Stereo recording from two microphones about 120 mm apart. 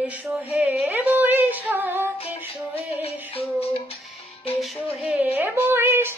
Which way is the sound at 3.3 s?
55° left (ahead or behind).